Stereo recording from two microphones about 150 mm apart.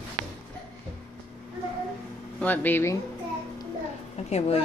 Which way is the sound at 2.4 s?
10° left (ahead or behind).